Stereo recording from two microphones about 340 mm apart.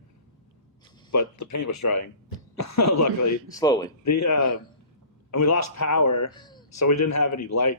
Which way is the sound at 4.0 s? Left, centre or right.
Left.